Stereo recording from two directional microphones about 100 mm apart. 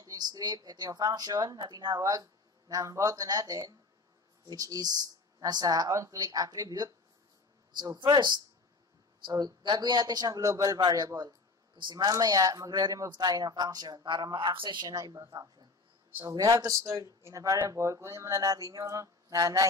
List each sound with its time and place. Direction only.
0.0 s a man's voice: 40° right (ahead or behind)
8.1 s a man's voice: 50° right (ahead or behind)